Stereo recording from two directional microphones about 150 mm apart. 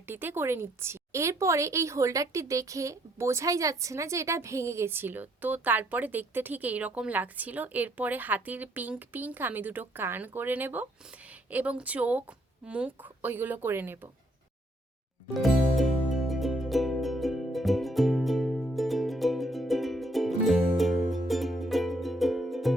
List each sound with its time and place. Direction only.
0.0 s a woman's voice: 15° right (ahead or behind)
15.3 s music: centre (ahead or behind)